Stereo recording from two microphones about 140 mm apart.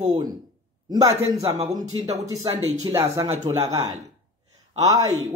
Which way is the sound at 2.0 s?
50° right (ahead or behind).